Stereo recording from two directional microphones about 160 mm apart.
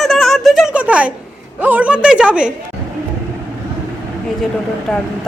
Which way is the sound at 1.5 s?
10° right (ahead or behind).